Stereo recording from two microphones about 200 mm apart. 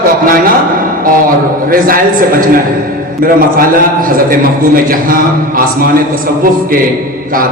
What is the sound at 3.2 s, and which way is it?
A man's voice, 45° right (ahead or behind).